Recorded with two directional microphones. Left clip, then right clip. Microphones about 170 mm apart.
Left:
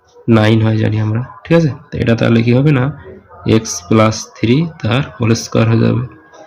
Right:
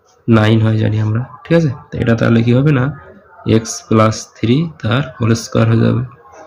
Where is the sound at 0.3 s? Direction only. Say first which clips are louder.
Left 1 dB; 10° left (ahead or behind).